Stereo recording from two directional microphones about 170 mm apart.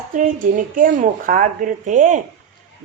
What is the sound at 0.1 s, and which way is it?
A woman's voice, 50° right (ahead or behind).